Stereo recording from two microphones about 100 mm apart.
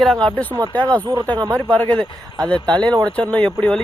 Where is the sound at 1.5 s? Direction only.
10° left (ahead or behind).